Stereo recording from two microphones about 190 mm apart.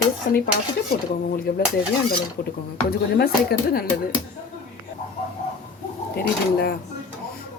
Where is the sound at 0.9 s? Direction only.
50° left (ahead or behind).